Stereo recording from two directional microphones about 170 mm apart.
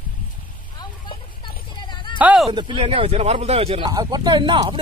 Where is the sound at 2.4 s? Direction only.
30° right (ahead or behind).